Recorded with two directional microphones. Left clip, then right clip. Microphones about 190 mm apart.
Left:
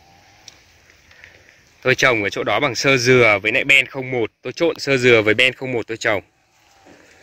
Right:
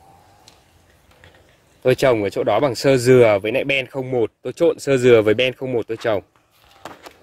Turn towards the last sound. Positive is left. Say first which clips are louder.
# even
turn(degrees=-5)  # may be behind; listen again after turning